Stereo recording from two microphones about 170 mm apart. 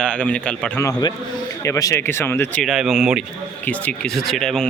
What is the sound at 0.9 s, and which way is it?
A man's voice, 25° left (ahead or behind).